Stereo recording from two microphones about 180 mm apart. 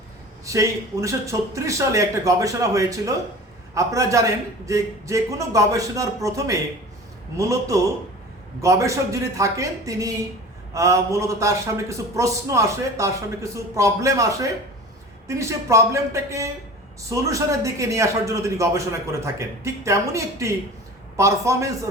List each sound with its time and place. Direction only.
0.4 s a man's voice: 15° right (ahead or behind)